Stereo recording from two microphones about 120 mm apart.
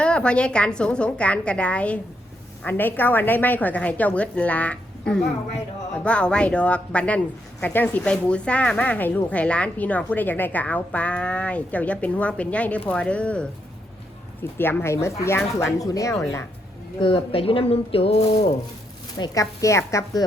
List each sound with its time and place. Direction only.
0.0 s speech: 10° left (ahead or behind)
14.6 s a woman's voice: 20° left (ahead or behind)
17.0 s speech: 50° left (ahead or behind)
18.3 s a sound: 65° left (ahead or behind)
19.2 s a woman's voice: 30° left (ahead or behind)